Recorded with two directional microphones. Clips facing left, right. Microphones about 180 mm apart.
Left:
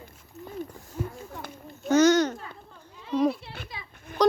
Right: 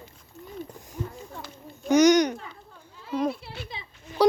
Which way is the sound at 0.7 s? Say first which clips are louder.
Right 1 dB; 20° right (ahead or behind).